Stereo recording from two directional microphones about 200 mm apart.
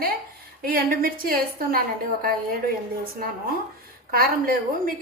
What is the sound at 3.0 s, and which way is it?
A woman's voice, 50° right (ahead or behind).